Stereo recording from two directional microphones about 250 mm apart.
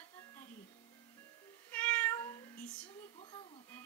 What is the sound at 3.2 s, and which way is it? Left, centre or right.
Music, centre.